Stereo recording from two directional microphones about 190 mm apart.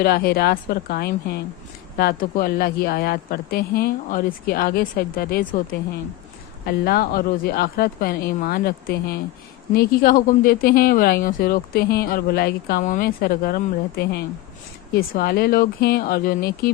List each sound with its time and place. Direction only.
0.0 s speech: 55° left (ahead or behind)
6.7 s speech: 55° left (ahead or behind)